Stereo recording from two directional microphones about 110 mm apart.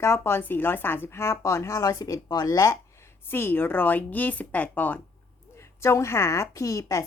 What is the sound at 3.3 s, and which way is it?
A woman's voice, 20° left (ahead or behind).